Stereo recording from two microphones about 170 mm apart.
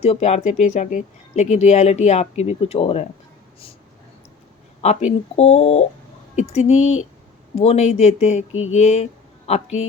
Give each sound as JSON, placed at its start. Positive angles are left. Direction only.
{"t": 0.0, "sound": "speech", "side_deg": 40}
{"t": 4.8, "sound": "speech", "side_deg": 40}